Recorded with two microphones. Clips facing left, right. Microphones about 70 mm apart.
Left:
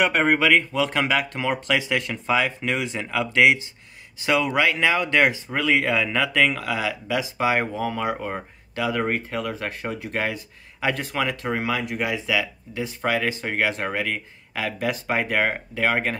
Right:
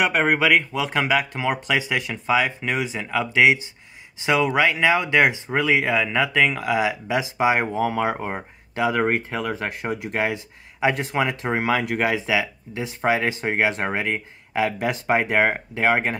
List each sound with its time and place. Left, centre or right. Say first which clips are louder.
0.0 s speech: even; centre
4.2 s speech: right 2 dB; centre
11.7 s speech: right 4 dB; right
12.3 s speech: right 2 dB; right